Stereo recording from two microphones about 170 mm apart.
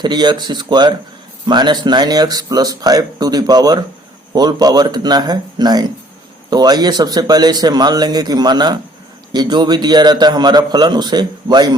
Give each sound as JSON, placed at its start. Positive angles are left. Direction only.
{"t": 0.0, "sound": "speech", "side_deg": -25}